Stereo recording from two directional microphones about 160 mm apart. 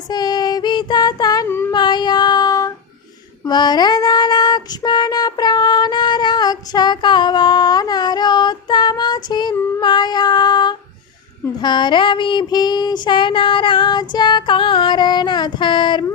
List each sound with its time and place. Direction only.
0.1 s child singing: 25° left (ahead or behind)
1.7 s child singing: 25° left (ahead or behind)